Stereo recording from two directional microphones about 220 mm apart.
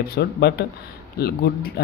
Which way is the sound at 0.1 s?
50° left (ahead or behind).